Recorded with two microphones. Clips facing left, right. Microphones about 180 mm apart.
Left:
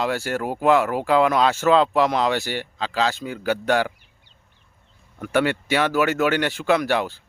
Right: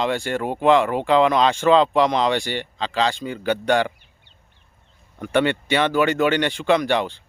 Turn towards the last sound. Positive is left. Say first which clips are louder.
# right 1 dB
turn(degrees=5)  # may be behind; listen again after turning